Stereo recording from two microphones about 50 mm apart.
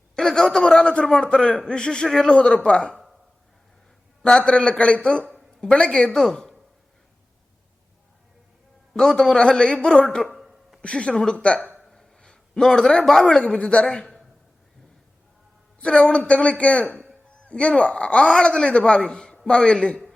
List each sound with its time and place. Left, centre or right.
0.2 s a man's voice: centre
4.2 s a man's voice: centre
8.9 s a man's voice: centre
10.2 s a sound: centre
10.8 s a man's voice: left
11.8 s a sound: centre
13.2 s a man's voice: left
14.0 s a sound: centre
15.8 s a man's voice: left